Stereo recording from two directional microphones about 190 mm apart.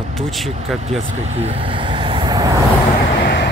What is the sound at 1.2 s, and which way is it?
Vehicle, 35° right (ahead or behind).